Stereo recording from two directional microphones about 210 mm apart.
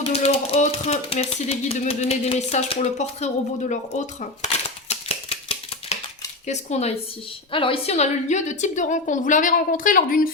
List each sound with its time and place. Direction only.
0.0 s speech: 30° left (ahead or behind)
3.7 s shuffling cards: 35° left (ahead or behind)
6.5 s speech: 30° left (ahead or behind)